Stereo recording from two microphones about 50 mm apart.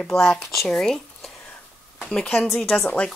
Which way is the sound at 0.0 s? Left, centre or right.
Centre.